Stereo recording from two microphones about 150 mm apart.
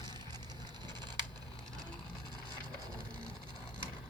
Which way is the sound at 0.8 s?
30° right (ahead or behind).